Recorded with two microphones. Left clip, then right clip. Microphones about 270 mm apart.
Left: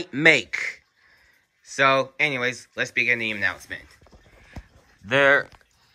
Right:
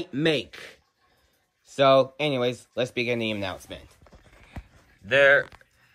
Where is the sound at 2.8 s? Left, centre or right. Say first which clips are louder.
Left 5 dB; centre.